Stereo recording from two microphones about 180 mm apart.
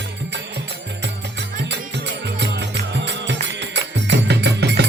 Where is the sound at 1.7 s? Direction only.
70° right (ahead or behind).